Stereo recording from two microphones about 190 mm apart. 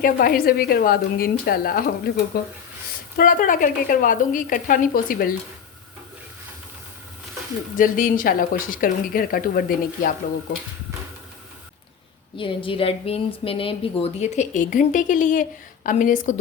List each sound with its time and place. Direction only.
0.0 s a woman's voice: 50° left (ahead or behind)
3.2 s a woman's voice: 45° left (ahead or behind)
7.8 s a woman's voice: 45° left (ahead or behind)
12.4 s a woman's voice: 25° left (ahead or behind); by 16.4 s 40° left (ahead or behind)